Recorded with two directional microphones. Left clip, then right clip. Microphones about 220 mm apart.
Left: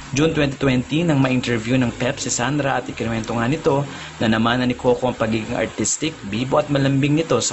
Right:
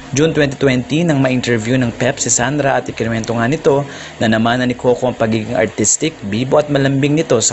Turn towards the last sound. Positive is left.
turn(degrees=-20)  # may be behind; listen again after turning